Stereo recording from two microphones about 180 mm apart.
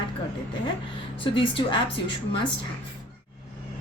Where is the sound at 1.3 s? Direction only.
30° left (ahead or behind).